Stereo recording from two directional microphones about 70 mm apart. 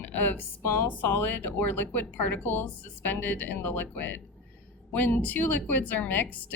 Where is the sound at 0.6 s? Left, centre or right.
Left.